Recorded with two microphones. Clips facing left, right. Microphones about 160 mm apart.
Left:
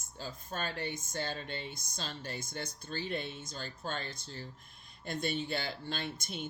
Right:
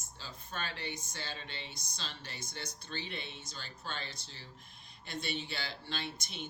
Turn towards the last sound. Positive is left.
turn(degrees=50)  # may be behind; listen again after turning